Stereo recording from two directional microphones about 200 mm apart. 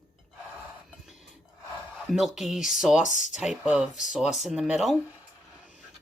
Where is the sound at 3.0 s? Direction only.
40° left (ahead or behind).